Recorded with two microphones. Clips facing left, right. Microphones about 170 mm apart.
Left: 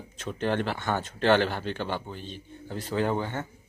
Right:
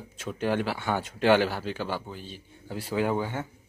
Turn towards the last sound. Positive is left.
turn(degrees=-10)  # may be behind; listen again after turning